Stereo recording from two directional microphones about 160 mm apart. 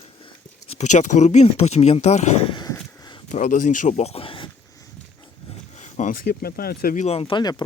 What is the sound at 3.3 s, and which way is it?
Speech, 50° left (ahead or behind).